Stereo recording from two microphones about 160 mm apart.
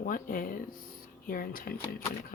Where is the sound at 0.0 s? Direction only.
60° left (ahead or behind).